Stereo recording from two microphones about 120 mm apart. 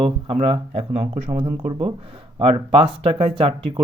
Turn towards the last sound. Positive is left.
turn(degrees=-45)  # may be behind; listen again after turning